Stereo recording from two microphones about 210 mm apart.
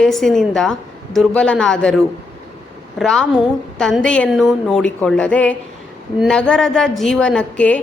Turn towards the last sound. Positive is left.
turn(degrees=5)  # may be behind; listen again after turning